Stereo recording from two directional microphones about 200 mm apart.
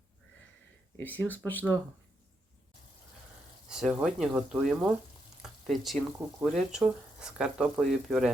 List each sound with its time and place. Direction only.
0.9 s speech: 10° left (ahead or behind)
3.7 s speech: 5° right (ahead or behind)